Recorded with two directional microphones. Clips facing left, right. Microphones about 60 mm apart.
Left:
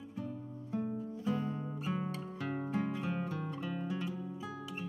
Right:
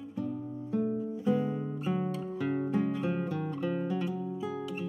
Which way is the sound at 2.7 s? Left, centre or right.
Centre.